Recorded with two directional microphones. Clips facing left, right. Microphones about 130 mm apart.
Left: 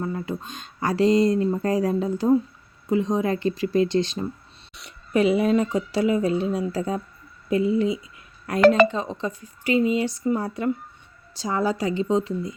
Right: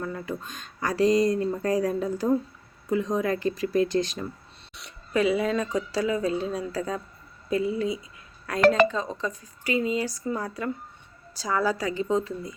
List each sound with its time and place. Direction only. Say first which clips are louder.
0.0 s speech: left 3 dB; 25° left (ahead or behind)
4.8 s speech: left 1 dB; centre (ahead or behind)
5.1 s speech: left 4 dB; 25° left (ahead or behind)